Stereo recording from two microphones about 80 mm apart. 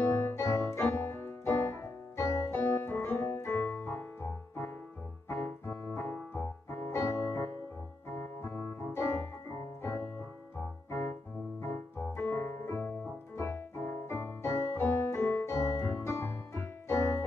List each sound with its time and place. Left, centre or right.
0.2 s keyboard: left
2.5 s piano: left
2.9 s music: left
5.3 s keyboard: left
9.5 s keyboard: left
10.9 s music: left
13.4 s keyboard: left